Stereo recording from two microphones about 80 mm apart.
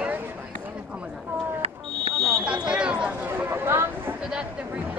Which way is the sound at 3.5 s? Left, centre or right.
Right.